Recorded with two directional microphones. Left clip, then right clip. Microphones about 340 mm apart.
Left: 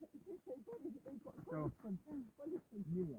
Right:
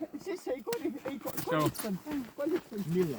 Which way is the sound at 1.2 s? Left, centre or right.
Centre.